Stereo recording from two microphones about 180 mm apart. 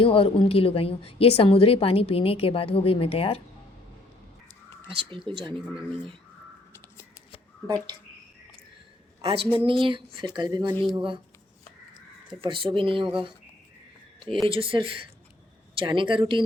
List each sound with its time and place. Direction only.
0.0 s a woman's voice: 30° left (ahead or behind)
4.9 s speech: 30° right (ahead or behind)
5.5 s speech: centre (ahead or behind)
9.2 s a woman's voice: 30° right (ahead or behind)
12.4 s speech: 30° right (ahead or behind)
14.4 s speech: 30° right (ahead or behind)